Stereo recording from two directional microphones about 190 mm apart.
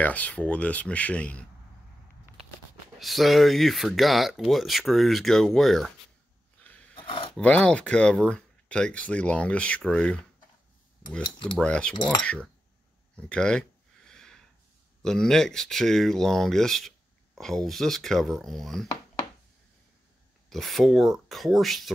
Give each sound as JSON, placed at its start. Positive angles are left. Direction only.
{"t": 0.0, "sound": "speech", "side_deg": 10}
{"t": 3.0, "sound": "speech", "side_deg": 0}
{"t": 6.6, "sound": "a sound", "side_deg": 10}
{"t": 7.0, "sound": "a sound", "side_deg": 30}
{"t": 7.3, "sound": "speech", "side_deg": 5}
{"t": 11.6, "sound": "speech", "side_deg": 5}
{"t": 13.3, "sound": "a sound", "side_deg": 5}
{"t": 15.0, "sound": "speech", "side_deg": 0}
{"t": 20.4, "sound": "speech", "side_deg": 0}